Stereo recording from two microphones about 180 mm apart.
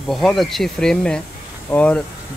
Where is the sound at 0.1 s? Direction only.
Centre (ahead or behind).